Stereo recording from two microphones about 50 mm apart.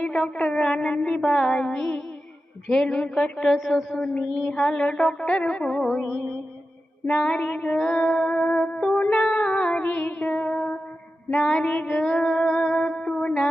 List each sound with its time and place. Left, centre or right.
0.0 s a sound: left
3.3 s a woman's voice: centre
4.4 s music: centre
7.1 s music: left
11.3 s music: centre